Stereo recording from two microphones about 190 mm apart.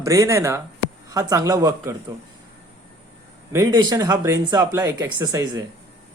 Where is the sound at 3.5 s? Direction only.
20° right (ahead or behind).